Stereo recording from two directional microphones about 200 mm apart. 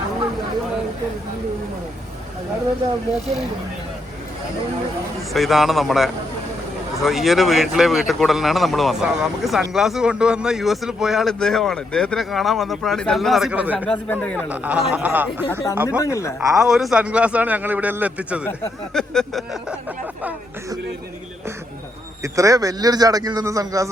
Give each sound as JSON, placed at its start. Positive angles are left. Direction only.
{"t": 5.3, "sound": "speech", "side_deg": 0}
{"t": 13.8, "sound": "a man's voice", "side_deg": 5}
{"t": 14.5, "sound": "speech", "side_deg": -5}
{"t": 16.0, "sound": "a man's voice", "side_deg": 15}
{"t": 16.6, "sound": "speech", "side_deg": 0}
{"t": 22.2, "sound": "speech", "side_deg": -15}